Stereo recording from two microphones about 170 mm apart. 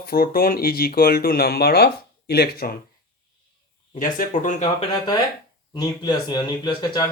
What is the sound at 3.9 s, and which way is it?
Speech, 50° left (ahead or behind).